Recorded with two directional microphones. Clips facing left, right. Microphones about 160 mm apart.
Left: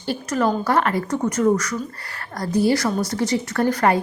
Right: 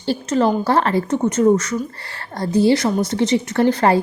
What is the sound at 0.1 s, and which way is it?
A woman's voice, 30° right (ahead or behind).